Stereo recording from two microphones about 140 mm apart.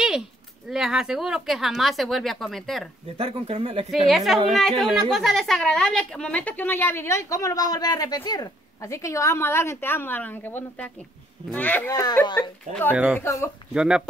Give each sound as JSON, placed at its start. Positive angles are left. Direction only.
{"t": 0.7, "sound": "speech", "side_deg": -5}
{"t": 3.2, "sound": "speech", "side_deg": -40}
{"t": 3.9, "sound": "a woman's voice", "side_deg": 0}
{"t": 11.9, "sound": "speech", "side_deg": 30}
{"t": 12.4, "sound": "a woman's voice", "side_deg": 15}
{"t": 12.9, "sound": "speech", "side_deg": -10}
{"t": 13.2, "sound": "speech", "side_deg": 20}
{"t": 13.7, "sound": "speech", "side_deg": -5}